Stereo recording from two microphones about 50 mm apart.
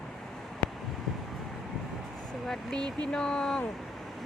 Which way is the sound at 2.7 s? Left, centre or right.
Centre.